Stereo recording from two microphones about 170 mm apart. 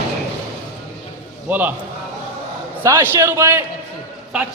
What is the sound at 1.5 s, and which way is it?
Speech, 10° right (ahead or behind).